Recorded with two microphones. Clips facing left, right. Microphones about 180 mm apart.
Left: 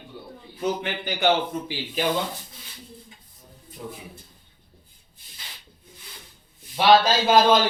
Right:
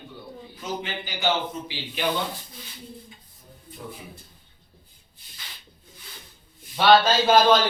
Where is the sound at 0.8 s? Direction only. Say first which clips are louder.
Left 1 dB; 55° left (ahead or behind).